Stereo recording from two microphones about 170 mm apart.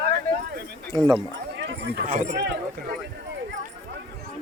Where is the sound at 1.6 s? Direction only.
85° right.